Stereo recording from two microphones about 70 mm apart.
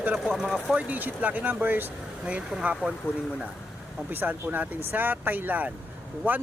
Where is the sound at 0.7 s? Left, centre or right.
Right.